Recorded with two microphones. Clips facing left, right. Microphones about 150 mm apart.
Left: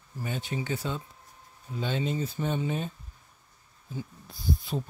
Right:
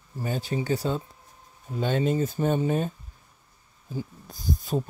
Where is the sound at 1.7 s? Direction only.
50° right (ahead or behind).